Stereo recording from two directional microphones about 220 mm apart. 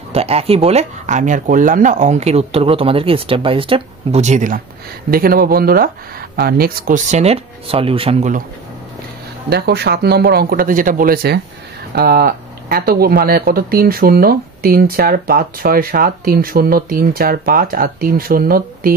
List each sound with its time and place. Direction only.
0.1 s speech: 25° right (ahead or behind)
9.5 s speech: 45° right (ahead or behind)